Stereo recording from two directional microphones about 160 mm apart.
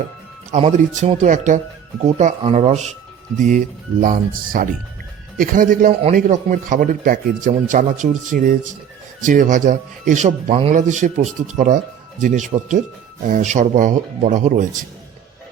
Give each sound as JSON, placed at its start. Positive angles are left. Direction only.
{"t": 0.5, "sound": "a man's voice", "side_deg": -40}